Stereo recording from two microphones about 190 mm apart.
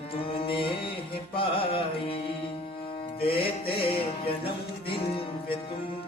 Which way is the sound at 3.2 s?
30° left (ahead or behind).